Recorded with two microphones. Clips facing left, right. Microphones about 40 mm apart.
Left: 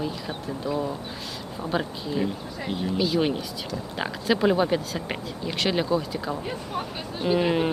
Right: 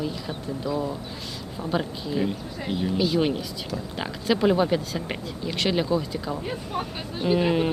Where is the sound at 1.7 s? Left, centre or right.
Centre.